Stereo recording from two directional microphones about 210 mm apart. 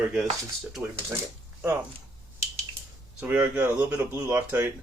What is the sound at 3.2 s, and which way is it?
Speech, 5° right (ahead or behind).